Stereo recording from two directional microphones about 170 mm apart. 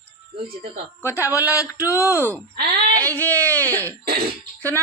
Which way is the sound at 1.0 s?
15° left (ahead or behind).